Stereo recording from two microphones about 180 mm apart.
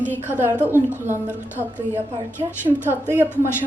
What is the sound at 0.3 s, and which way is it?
A woman's voice, 10° right (ahead or behind).